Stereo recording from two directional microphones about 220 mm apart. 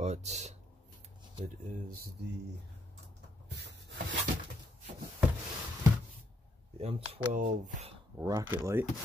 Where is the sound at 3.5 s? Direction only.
50° right (ahead or behind).